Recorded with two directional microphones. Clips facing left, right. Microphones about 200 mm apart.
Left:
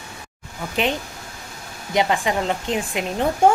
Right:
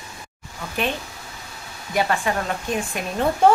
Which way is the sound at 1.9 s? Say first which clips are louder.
Left 2 dB; 20° left (ahead or behind).